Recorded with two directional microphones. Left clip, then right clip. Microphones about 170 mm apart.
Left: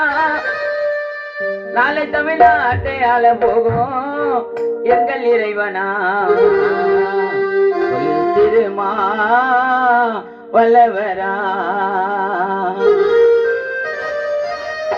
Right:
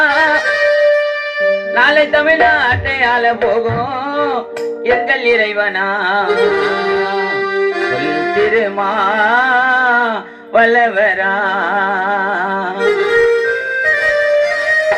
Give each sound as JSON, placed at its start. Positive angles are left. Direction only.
{"t": 0.0, "sound": "music", "side_deg": -35}
{"t": 8.4, "sound": "music", "side_deg": -15}
{"t": 10.5, "sound": "music", "side_deg": -15}
{"t": 13.1, "sound": "music", "side_deg": -20}